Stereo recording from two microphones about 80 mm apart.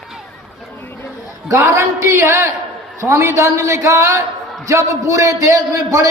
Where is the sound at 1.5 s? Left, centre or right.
Right.